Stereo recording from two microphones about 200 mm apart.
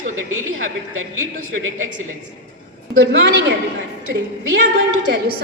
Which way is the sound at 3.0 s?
60° right (ahead or behind).